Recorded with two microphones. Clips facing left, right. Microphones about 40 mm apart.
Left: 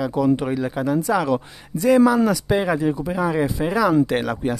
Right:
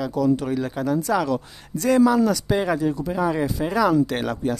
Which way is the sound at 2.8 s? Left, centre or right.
Left.